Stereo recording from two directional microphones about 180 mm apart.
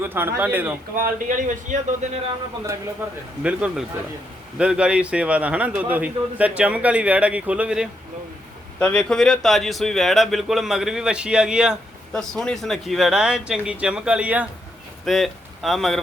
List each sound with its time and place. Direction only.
0.0 s a man's voice: 10° right (ahead or behind)
0.9 s a man's voice: 50° right (ahead or behind)
3.0 s a man's voice: 10° right (ahead or behind)
8.8 s a man's voice: 5° left (ahead or behind)